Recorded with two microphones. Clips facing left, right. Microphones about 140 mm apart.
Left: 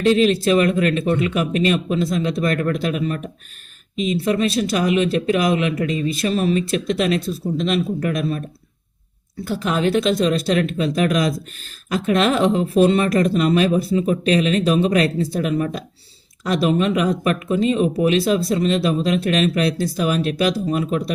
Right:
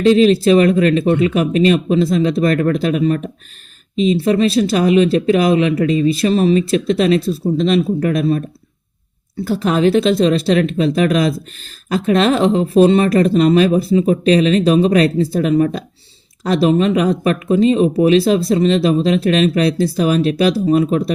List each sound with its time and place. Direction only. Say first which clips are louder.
0.0 s speech: right 5 dB; 30° right (ahead or behind)
9.6 s speech: right 5 dB; 35° right (ahead or behind)